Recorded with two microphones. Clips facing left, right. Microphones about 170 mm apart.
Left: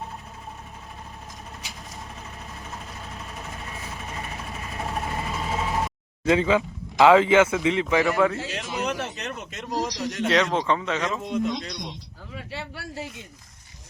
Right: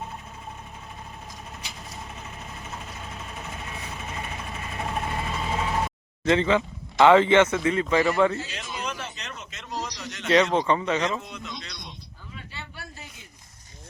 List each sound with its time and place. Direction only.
4.7 s vehicle: centre (ahead or behind)
6.2 s speech: 10° left (ahead or behind)
8.4 s speech: 80° left; by 9.6 s 55° left (ahead or behind)
9.6 s a man's voice: 40° left (ahead or behind)
10.2 s speech: centre (ahead or behind)
11.3 s speech: 50° left (ahead or behind)
11.8 s a sound: 80° left